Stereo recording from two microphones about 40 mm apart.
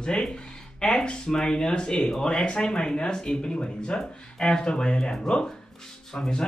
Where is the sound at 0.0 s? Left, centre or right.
Centre.